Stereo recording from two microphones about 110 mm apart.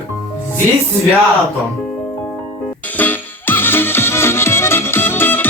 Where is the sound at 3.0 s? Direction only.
15° left (ahead or behind).